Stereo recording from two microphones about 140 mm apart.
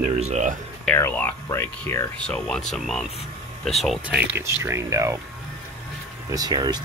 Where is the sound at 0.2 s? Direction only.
60° right (ahead or behind).